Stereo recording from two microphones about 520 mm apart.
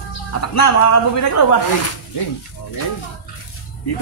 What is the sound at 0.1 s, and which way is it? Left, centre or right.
Speech, left.